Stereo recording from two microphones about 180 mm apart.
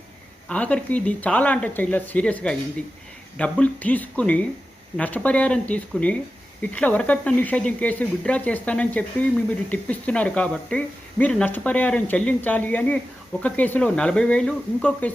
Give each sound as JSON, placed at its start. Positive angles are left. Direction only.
{"t": 0.4, "sound": "speech", "side_deg": 5}